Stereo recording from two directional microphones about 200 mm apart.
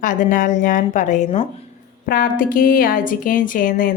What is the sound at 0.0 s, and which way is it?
A woman's voice, 40° left (ahead or behind).